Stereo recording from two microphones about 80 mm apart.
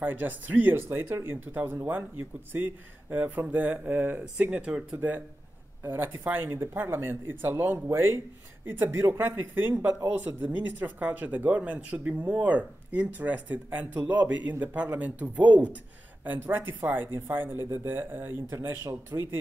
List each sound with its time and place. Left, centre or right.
0.0 s speech: right
5.9 s speech: right
19.1 s speech: right